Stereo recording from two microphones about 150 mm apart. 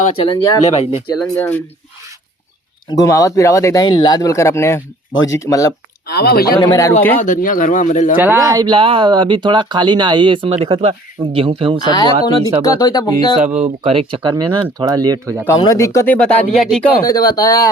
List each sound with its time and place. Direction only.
0.2 s speech: 30° left (ahead or behind)
0.7 s speech: 45° left (ahead or behind)
1.4 s speech: 10° left (ahead or behind)
2.9 s speech: 25° left (ahead or behind)
6.1 s speech: 90° left
6.6 s speech: 25° left (ahead or behind)
7.2 s speech: 60° left (ahead or behind)
8.1 s speech: 10° right (ahead or behind)
8.4 s speech: 25° right (ahead or behind)
11.8 s speech: 30° left (ahead or behind)
13.6 s speech: 35° right (ahead or behind)
15.4 s speech: 25° left (ahead or behind)
16.1 s speech: 10° left (ahead or behind)
17.0 s speech: 25° left (ahead or behind)